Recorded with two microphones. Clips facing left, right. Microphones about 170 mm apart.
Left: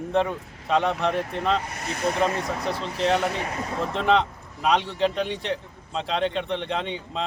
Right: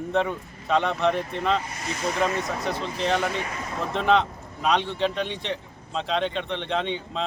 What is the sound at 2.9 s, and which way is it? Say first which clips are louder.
Speech: left 3 dB; centre (ahead or behind).